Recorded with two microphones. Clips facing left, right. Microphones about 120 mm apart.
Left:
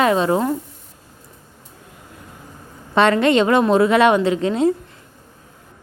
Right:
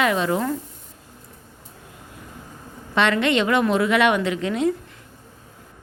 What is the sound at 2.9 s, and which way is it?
A woman's voice, 35° left (ahead or behind).